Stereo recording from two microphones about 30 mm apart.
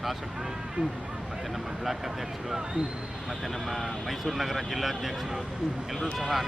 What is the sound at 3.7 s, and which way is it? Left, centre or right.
Speech, centre.